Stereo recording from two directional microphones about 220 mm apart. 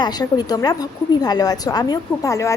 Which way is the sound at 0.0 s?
20° left (ahead or behind).